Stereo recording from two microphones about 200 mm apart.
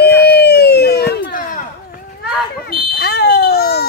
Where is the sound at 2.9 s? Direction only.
55° left (ahead or behind).